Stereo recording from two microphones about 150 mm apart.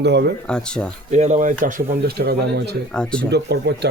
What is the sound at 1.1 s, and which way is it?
Speech, 50° right (ahead or behind).